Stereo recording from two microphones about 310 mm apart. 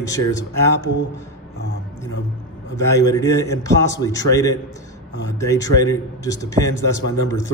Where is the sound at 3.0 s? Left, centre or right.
Centre.